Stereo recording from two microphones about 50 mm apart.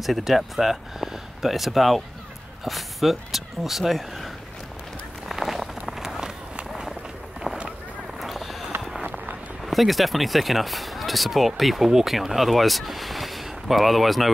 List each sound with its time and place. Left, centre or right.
0.0 s speech: centre
5.3 s run: centre
7.5 s run: centre
8.2 s run: centre
9.0 s run: right
9.7 s speech: centre